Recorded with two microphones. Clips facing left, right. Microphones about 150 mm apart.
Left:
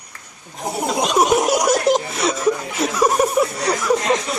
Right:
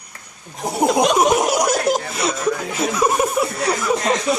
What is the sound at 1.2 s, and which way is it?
Speech, centre (ahead or behind).